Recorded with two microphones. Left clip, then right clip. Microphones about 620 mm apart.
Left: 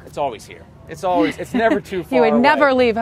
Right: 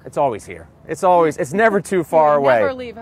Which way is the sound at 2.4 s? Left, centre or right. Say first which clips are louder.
Left 3 dB; left.